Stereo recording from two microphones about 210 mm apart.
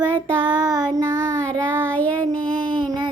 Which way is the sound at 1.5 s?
5° left (ahead or behind).